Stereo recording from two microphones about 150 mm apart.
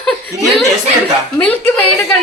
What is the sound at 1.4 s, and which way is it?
Chuckle, 10° left (ahead or behind).